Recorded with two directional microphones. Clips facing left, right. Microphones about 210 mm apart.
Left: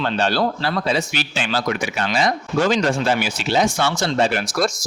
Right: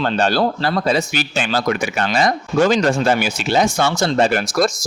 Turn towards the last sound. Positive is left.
turn(degrees=-45)  # may be behind; listen again after turning